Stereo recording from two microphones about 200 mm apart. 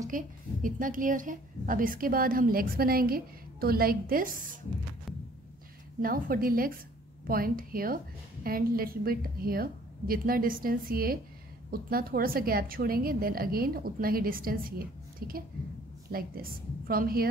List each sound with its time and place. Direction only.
0.1 s a woman's voice: 40° right (ahead or behind)
6.0 s a woman's voice: 45° right (ahead or behind)